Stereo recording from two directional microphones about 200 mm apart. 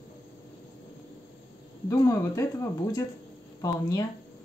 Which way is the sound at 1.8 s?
15° left (ahead or behind).